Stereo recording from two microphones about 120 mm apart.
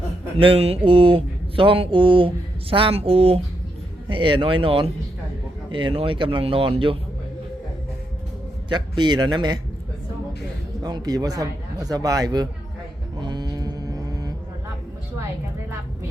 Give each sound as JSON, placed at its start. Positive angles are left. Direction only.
{"t": 0.3, "sound": "speech", "side_deg": -50}
{"t": 8.7, "sound": "a man's voice", "side_deg": -35}
{"t": 10.8, "sound": "a man's voice", "side_deg": -35}
{"t": 13.1, "sound": "a sound", "side_deg": -40}